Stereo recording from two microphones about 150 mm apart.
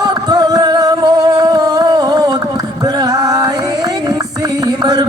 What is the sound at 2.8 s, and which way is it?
Music, 25° right (ahead or behind).